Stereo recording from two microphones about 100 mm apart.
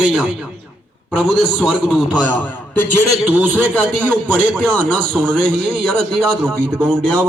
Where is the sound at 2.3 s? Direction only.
15° left (ahead or behind).